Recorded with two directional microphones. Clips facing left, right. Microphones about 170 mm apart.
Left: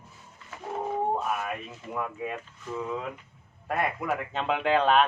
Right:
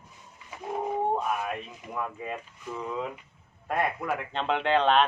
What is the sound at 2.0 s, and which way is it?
Speech, 5° left (ahead or behind).